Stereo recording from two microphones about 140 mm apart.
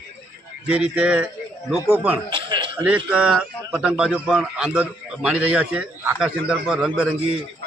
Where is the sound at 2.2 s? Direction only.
35° right (ahead or behind).